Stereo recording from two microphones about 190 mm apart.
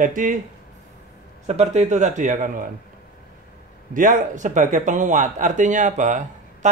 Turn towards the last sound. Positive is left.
turn(degrees=-40)  # may be behind; listen again after turning